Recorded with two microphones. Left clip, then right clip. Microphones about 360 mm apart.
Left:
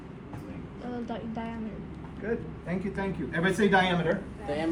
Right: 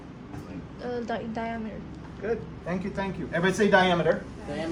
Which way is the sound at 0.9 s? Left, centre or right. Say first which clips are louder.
Right 5 dB; right.